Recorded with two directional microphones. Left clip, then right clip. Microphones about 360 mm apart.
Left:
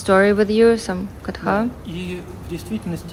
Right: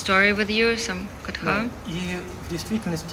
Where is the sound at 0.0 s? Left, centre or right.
Centre.